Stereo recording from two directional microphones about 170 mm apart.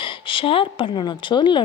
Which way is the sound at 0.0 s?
30° left (ahead or behind).